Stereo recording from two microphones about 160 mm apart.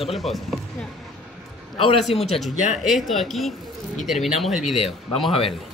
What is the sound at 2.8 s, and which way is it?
Speech, centre (ahead or behind).